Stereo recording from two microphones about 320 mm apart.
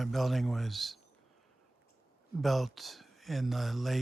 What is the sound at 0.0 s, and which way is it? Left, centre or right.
Speech, centre.